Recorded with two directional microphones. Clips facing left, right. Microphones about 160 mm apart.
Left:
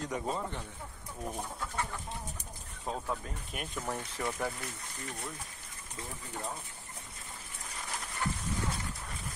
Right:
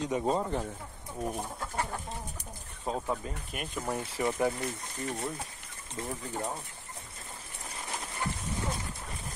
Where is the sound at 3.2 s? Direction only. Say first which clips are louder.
Right 3 dB; 5° right (ahead or behind).